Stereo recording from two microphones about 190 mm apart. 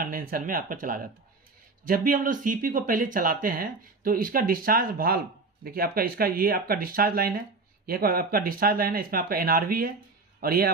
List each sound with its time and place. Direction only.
0.0 s speech: 50° right (ahead or behind)